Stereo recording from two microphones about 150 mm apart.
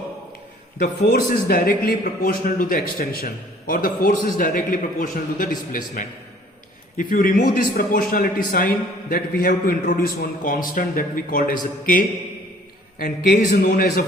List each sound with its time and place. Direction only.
0.8 s a man's voice: 65° left (ahead or behind)
13.0 s a man's voice: 65° left (ahead or behind)